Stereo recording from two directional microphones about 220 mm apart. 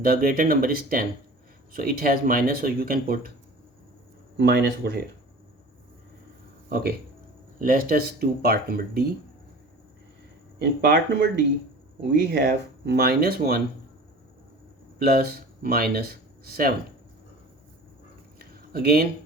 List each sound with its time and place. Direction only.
0.0 s speech: 40° right (ahead or behind)
4.4 s speech: 45° right (ahead or behind)
6.7 s speech: 45° right (ahead or behind)
10.6 s speech: 50° right (ahead or behind)
12.3 s speech: 50° right (ahead or behind)
14.9 s speech: 45° right (ahead or behind)
18.3 s a sound: 45° right (ahead or behind)